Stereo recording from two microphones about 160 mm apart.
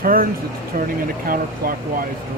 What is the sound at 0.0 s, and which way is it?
Speech, 65° right (ahead or behind).